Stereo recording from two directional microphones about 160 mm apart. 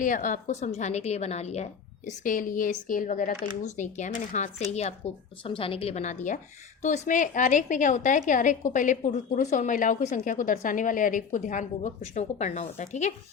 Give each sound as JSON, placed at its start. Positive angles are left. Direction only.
{"t": 0.0, "sound": "a woman's voice", "side_deg": 50}
{"t": 2.0, "sound": "a woman's voice", "side_deg": 55}